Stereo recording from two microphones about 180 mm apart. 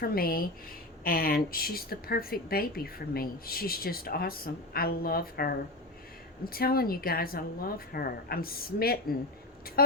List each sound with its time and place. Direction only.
0.0 s speech: 55° left (ahead or behind)